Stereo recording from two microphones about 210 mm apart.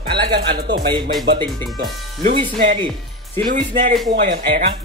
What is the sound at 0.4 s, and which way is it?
Speech, 50° right (ahead or behind).